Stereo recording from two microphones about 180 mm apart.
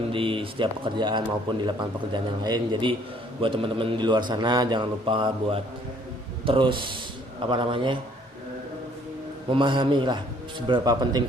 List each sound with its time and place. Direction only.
0.1 s a man's voice: 30° right (ahead or behind)
9.5 s a man's voice: 25° right (ahead or behind)